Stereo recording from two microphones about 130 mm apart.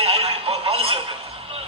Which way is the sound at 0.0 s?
50° right (ahead or behind).